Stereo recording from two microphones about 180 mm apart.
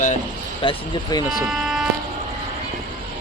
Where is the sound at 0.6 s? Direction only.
30° left (ahead or behind).